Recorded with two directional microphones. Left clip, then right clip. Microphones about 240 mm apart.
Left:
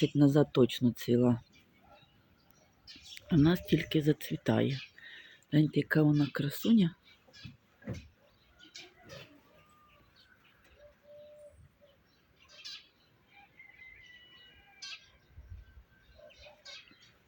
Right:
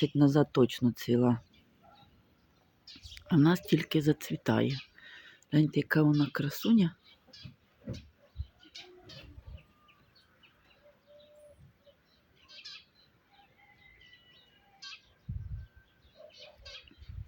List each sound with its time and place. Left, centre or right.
0.0 s speech: centre
2.8 s speech: centre
14.8 s bird: left